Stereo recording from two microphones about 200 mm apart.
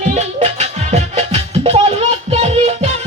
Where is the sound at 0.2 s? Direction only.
35° right (ahead or behind).